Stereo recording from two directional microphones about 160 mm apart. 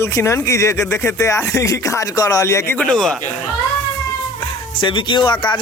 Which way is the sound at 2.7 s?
5° left (ahead or behind).